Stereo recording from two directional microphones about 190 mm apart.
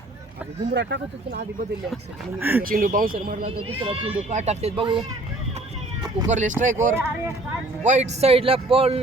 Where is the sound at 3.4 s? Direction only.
30° right (ahead or behind).